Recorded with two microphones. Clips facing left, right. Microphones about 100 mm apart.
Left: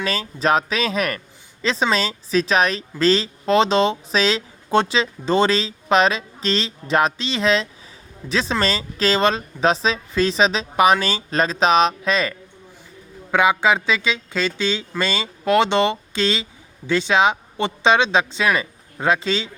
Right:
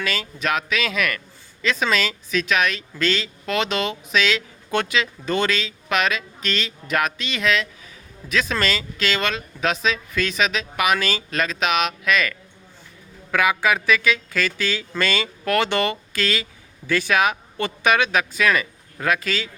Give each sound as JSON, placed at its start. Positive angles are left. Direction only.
{"t": 0.0, "sound": "speech", "side_deg": 35}